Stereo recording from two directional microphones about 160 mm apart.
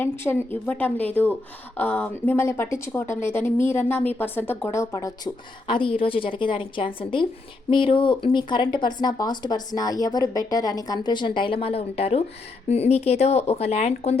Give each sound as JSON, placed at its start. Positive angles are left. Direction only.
{"t": 0.0, "sound": "speech", "side_deg": 15}
{"t": 5.6, "sound": "a woman's voice", "side_deg": 30}